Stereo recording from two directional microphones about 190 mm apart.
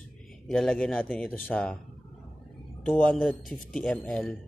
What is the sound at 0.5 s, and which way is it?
A man's voice, 5° left (ahead or behind).